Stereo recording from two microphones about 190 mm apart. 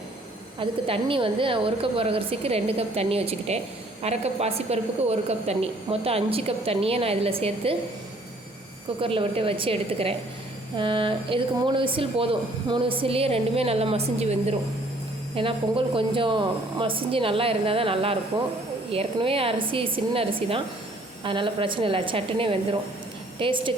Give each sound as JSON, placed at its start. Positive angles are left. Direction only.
{"t": 0.6, "sound": "a woman's voice", "side_deg": -30}
{"t": 9.0, "sound": "speech", "side_deg": -30}